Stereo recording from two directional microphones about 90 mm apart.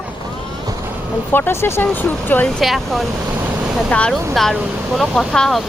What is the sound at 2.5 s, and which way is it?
Speech, centre (ahead or behind).